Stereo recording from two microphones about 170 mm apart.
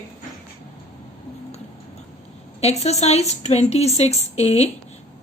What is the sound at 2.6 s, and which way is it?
A woman's voice, 40° left (ahead or behind).